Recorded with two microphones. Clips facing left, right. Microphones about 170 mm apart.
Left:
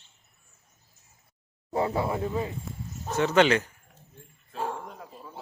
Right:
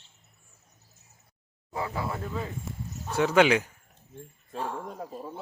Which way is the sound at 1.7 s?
30° left (ahead or behind).